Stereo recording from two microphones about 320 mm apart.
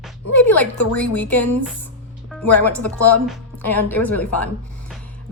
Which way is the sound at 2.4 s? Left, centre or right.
Left.